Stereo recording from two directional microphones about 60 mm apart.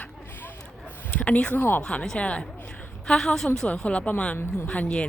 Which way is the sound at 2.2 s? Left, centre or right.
Left.